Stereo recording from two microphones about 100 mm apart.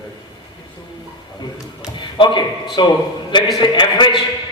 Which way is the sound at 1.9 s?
50° left (ahead or behind).